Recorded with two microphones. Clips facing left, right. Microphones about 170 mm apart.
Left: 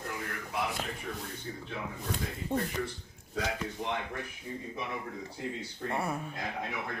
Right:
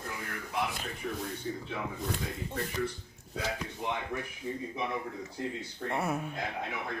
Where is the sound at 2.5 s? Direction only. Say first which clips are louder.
Left 7 dB; 55° left (ahead or behind).